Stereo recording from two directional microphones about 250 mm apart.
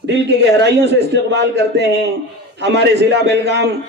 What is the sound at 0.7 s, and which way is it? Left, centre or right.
A man's voice, right.